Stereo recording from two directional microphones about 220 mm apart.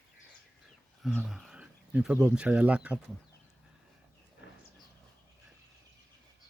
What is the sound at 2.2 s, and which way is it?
Speech, 5° right (ahead or behind).